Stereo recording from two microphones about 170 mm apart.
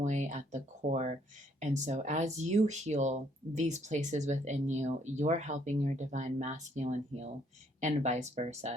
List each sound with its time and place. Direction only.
0.0 s speech: 45° right (ahead or behind)